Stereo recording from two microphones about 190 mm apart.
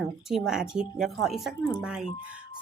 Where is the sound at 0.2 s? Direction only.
Centre (ahead or behind).